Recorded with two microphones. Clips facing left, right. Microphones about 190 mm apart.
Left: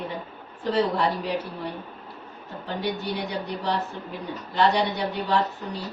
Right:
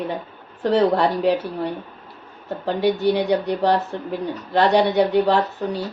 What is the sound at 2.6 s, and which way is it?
A woman's voice, 70° right (ahead or behind).